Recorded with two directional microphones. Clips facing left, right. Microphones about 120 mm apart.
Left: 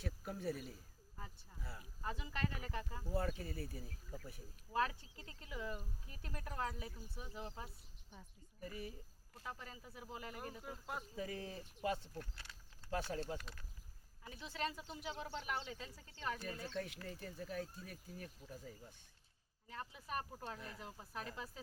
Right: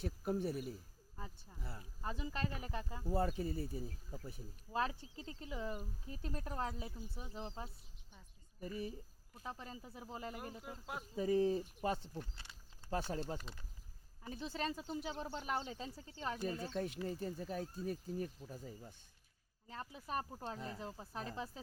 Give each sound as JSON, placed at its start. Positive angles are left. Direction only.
{"t": 0.3, "sound": "speech", "side_deg": -25}
{"t": 10.6, "sound": "speech", "side_deg": 0}
{"t": 11.2, "sound": "speech", "side_deg": -30}
{"t": 12.1, "sound": "speech", "side_deg": -20}
{"t": 14.3, "sound": "speech", "side_deg": -35}
{"t": 19.6, "sound": "speech", "side_deg": -30}